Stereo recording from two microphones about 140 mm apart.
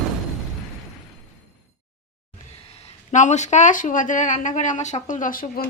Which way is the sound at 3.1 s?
60° left (ahead or behind).